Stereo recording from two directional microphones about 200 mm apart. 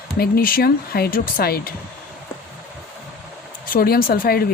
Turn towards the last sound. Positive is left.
turn(degrees=50)  # may be behind; listen again after turning